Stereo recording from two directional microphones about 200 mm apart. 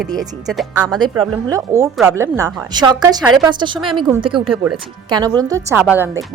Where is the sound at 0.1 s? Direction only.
20° right (ahead or behind).